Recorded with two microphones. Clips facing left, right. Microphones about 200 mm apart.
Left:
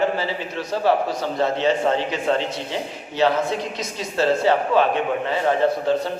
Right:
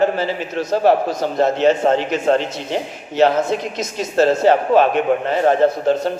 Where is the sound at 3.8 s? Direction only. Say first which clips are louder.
Right 6 dB; 45° right (ahead or behind).